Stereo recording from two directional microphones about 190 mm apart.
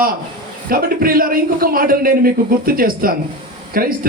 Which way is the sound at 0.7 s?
50° right (ahead or behind).